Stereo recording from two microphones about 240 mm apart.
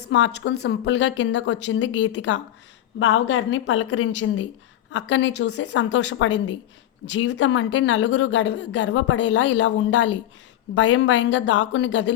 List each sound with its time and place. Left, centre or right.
0.0 s a woman's voice: left